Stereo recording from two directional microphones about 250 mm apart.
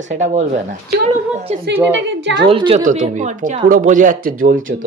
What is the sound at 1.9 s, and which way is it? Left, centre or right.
Speech, right.